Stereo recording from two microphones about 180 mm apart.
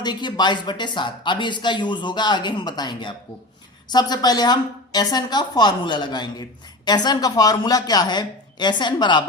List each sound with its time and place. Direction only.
0.0 s speech: 25° left (ahead or behind)